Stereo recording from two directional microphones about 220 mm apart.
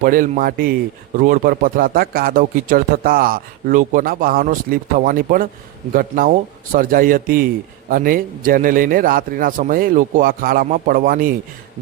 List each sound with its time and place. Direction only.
0.0 s speech: 40° right (ahead or behind)